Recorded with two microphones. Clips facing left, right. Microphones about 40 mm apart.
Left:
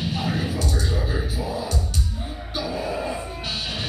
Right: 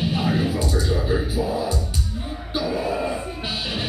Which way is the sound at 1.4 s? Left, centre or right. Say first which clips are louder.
Right 4 dB; centre.